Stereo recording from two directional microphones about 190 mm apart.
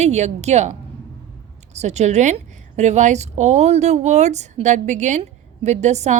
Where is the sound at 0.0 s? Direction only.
35° right (ahead or behind).